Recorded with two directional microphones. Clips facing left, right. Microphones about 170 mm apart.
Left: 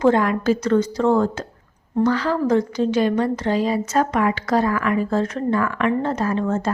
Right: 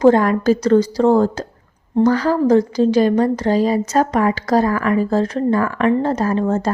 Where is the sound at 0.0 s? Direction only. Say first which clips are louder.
Right 5 dB; 40° right (ahead or behind).